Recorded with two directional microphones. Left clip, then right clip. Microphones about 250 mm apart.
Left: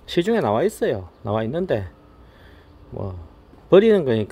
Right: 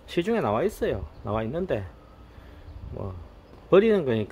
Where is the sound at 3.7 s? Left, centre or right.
Left.